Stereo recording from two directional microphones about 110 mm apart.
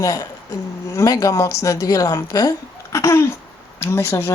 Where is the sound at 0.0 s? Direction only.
35° left (ahead or behind).